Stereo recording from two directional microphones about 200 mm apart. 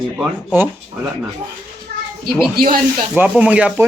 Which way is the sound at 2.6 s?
50° right (ahead or behind).